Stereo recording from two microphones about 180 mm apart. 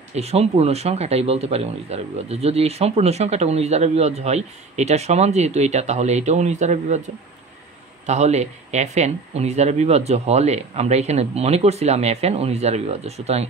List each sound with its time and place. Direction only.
0.1 s speech: 35° right (ahead or behind)
8.1 s speech: 40° right (ahead or behind)